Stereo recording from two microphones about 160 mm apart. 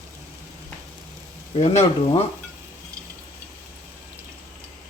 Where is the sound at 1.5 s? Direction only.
40° left (ahead or behind).